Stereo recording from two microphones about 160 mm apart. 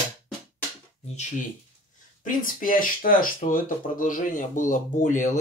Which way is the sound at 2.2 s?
60° left (ahead or behind).